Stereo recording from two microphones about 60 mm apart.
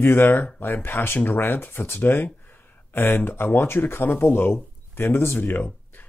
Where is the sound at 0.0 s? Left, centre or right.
Left.